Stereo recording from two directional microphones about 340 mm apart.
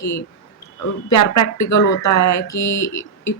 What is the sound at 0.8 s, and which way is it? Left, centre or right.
A woman's voice, left.